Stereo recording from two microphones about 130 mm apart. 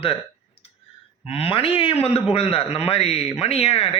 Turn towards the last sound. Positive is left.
turn(degrees=50)  # may be behind; listen again after turning